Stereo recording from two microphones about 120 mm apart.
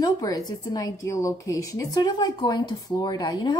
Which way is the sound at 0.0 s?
30° left (ahead or behind).